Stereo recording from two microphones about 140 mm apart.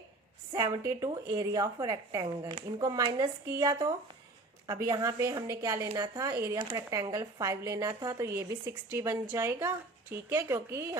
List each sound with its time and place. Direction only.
0.5 s speech: 25° right (ahead or behind)